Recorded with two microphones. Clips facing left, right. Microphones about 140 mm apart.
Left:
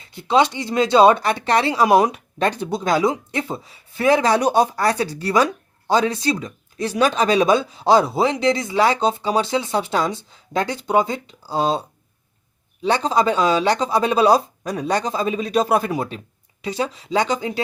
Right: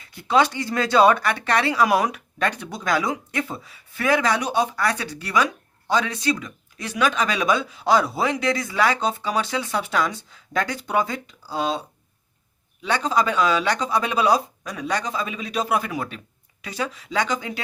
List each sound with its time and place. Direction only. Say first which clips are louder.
0.0 s speech: left 2 dB; 25° left (ahead or behind)
12.8 s speech: left 4 dB; 30° left (ahead or behind)